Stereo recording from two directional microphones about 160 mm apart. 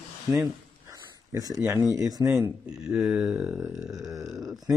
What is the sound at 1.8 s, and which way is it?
Speech, 20° right (ahead or behind).